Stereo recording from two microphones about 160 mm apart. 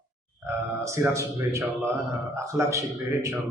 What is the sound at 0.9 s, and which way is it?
A man's voice, 15° right (ahead or behind).